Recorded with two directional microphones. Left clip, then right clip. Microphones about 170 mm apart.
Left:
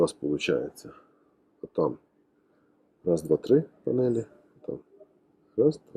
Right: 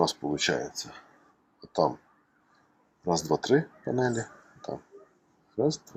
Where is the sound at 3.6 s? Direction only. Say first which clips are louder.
Left 2 dB; 20° right (ahead or behind).